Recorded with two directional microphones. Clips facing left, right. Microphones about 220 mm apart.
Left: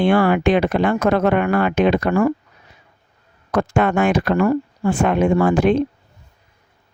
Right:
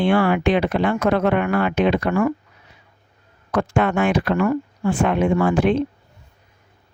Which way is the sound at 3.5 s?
45° left (ahead or behind).